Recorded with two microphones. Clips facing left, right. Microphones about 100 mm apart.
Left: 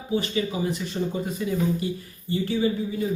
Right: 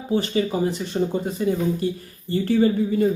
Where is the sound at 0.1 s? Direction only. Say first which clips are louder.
Right 4 dB; 40° right (ahead or behind).